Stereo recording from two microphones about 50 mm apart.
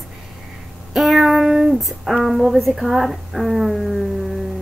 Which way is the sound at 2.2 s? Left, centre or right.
Centre.